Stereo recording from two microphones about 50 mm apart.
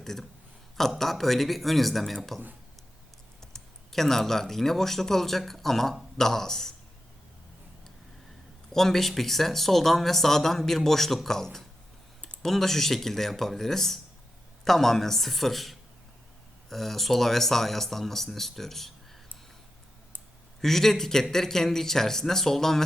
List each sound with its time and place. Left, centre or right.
0.0 s speech: centre
3.4 s speech: centre
8.7 s a man's voice: centre
20.6 s a man's voice: centre